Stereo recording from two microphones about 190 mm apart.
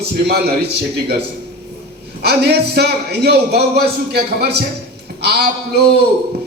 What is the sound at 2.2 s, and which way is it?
Music, 60° right (ahead or behind).